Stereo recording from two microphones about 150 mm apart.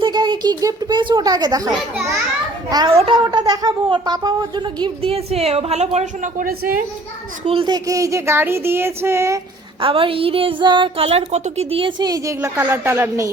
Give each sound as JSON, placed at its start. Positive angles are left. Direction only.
{"t": 0.0, "sound": "a child's voice", "side_deg": -30}
{"t": 2.9, "sound": "speech", "side_deg": -40}
{"t": 3.3, "sound": "speech", "side_deg": -25}
{"t": 7.4, "sound": "a sound", "side_deg": -35}
{"t": 9.8, "sound": "speech", "side_deg": -35}